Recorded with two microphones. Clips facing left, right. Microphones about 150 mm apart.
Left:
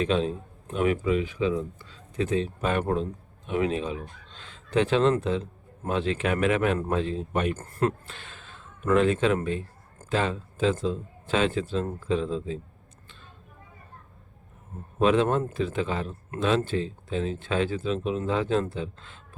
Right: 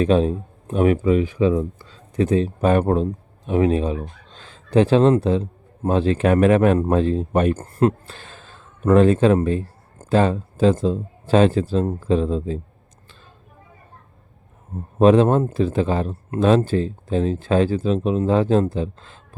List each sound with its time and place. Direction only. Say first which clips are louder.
0.0 s speech: right 8 dB; 40° right (ahead or behind)
1.8 s speech: right 8 dB; 35° right (ahead or behind)
14.9 s speech: right 8 dB; 40° right (ahead or behind)